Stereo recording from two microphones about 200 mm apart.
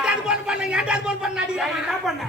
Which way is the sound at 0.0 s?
5° right (ahead or behind).